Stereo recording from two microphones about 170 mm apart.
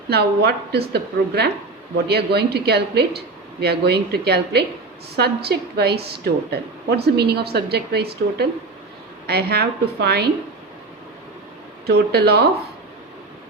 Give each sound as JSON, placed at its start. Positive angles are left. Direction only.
{"t": 0.1, "sound": "a woman's voice", "side_deg": -70}
{"t": 11.9, "sound": "a woman's voice", "side_deg": -70}